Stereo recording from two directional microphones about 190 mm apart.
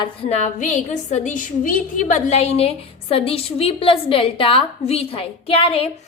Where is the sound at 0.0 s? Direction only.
30° left (ahead or behind).